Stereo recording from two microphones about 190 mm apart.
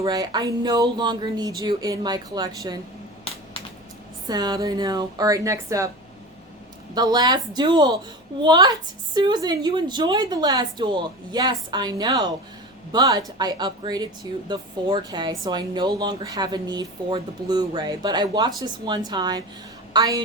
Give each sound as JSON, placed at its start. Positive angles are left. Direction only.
{"t": 0.0, "sound": "speech", "side_deg": -20}
{"t": 4.3, "sound": "speech", "side_deg": -20}
{"t": 6.9, "sound": "speech", "side_deg": -20}